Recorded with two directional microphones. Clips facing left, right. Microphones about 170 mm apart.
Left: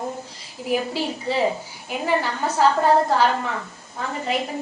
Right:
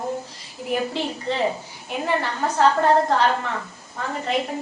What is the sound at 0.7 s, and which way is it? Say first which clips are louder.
A woman's voice: left 1 dB; 5° left (ahead or behind).